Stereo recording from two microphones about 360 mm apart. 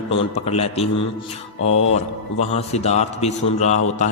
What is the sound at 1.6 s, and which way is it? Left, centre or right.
Mantra, left.